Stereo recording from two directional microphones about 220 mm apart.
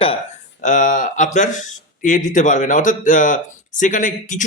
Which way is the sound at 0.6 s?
35° left (ahead or behind).